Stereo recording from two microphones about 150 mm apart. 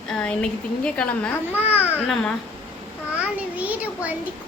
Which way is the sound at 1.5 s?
10° right (ahead or behind).